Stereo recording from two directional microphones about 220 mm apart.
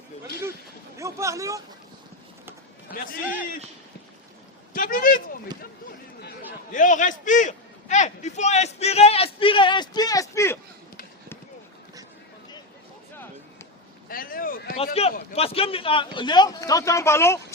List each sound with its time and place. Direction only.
0.9 s vehicle: 15° right (ahead or behind)
4.7 s speech: 40° left (ahead or behind)
6.7 s a man's voice: 35° left (ahead or behind); by 10.6 s 10° left (ahead or behind)
14.1 s speech: 40° left (ahead or behind)
15.0 s a man's voice: 30° left (ahead or behind); by 17.4 s 10° left (ahead or behind)